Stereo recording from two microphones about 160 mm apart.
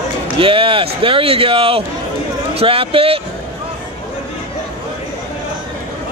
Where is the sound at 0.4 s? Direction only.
35° right (ahead or behind).